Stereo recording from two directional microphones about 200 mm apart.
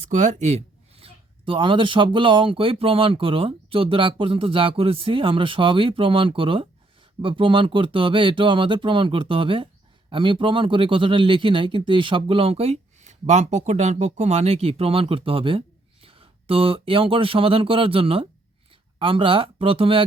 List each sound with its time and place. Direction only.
0.1 s speech: 40° right (ahead or behind)